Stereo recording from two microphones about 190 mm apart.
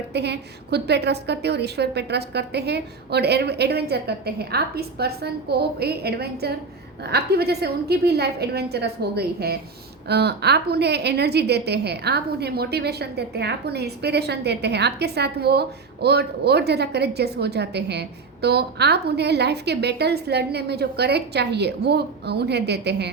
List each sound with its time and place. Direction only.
0.1 s a woman's voice: 60° right (ahead or behind)